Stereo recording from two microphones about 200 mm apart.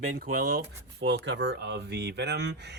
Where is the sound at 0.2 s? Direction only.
55° right (ahead or behind).